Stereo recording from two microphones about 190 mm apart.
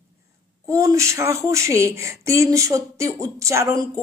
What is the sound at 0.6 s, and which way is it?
Speech, 15° right (ahead or behind).